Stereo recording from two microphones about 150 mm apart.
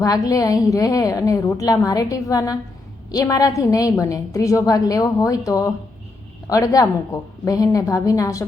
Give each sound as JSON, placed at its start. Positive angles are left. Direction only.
{"t": 0.0, "sound": "a woman's voice", "side_deg": 25}